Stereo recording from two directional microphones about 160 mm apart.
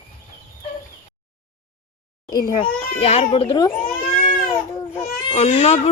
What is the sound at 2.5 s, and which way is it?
Speech, 40° left (ahead or behind).